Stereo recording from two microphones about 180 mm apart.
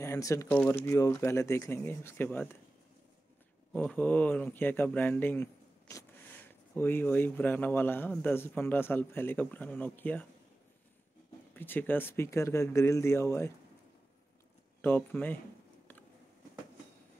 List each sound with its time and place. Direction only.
0.0 s speech: 15° left (ahead or behind)
3.7 s speech: 10° left (ahead or behind)
11.5 s speech: 10° left (ahead or behind)
14.8 s speech: 10° left (ahead or behind)